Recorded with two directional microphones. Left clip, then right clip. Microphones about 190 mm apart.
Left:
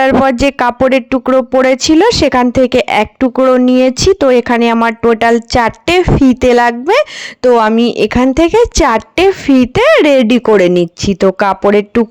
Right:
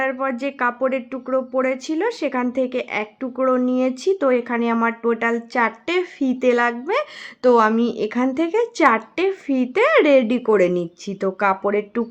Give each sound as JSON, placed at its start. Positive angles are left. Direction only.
{"t": 0.0, "sound": "speech", "side_deg": 50}